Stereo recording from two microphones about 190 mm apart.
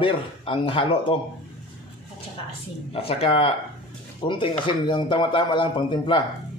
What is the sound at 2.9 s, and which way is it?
Speech, 30° left (ahead or behind).